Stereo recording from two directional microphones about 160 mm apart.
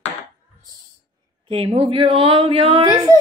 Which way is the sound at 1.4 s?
35° right (ahead or behind).